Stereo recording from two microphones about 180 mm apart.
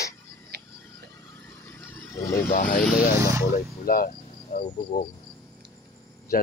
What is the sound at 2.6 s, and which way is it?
Speech, 55° left (ahead or behind).